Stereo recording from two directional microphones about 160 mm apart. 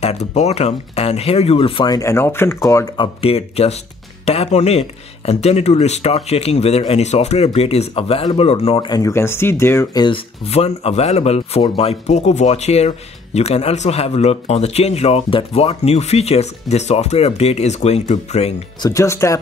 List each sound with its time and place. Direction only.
0.0 s speech: 40° left (ahead or behind)
2.0 s speech: 20° left (ahead or behind)
3.0 s speech: 35° left (ahead or behind)
8.9 s speech: 20° left (ahead or behind)
10.0 s speech: 35° left (ahead or behind)
18.8 s speech: 20° left (ahead or behind)